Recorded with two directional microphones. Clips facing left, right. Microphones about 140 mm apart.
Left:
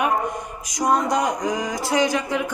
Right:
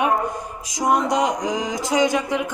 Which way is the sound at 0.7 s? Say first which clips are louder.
Right 1 dB; 20° right (ahead or behind).